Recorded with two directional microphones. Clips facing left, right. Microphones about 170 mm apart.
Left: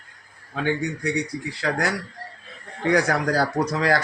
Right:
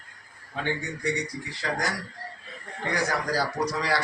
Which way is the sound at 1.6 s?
65° left (ahead or behind).